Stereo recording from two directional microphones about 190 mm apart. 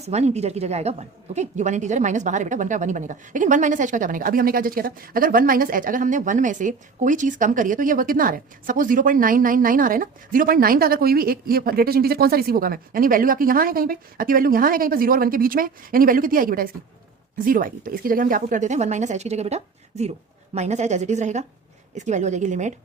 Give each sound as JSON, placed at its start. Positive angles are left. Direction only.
{"t": 0.0, "sound": "a woman's voice", "side_deg": -35}